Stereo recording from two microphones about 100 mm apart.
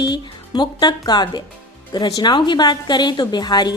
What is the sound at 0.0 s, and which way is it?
A woman's voice, 45° left (ahead or behind).